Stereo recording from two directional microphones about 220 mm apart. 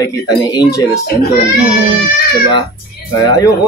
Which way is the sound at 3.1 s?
15° left (ahead or behind).